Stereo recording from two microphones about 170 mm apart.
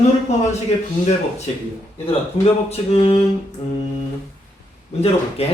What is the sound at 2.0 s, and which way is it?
Speech, 35° left (ahead or behind).